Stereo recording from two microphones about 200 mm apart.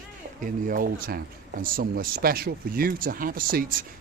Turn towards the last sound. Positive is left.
turn(degrees=-45)  # may be behind; listen again after turning